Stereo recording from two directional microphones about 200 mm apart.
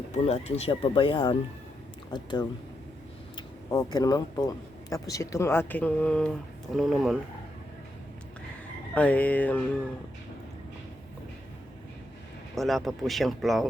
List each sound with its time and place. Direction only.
0.1 s speech: 30° left (ahead or behind)
3.3 s a sound: 20° left (ahead or behind)
3.9 s speech: 20° left (ahead or behind); by 7.2 s centre (ahead or behind)
9.0 s speech: 5° left (ahead or behind)
12.5 s speech: centre (ahead or behind)